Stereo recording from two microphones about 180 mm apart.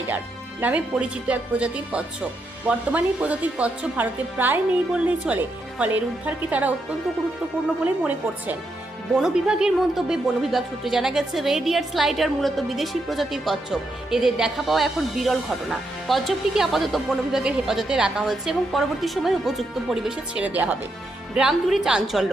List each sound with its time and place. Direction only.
0.6 s speech: 5° right (ahead or behind)
9.2 s a woman's voice: 5° right (ahead or behind)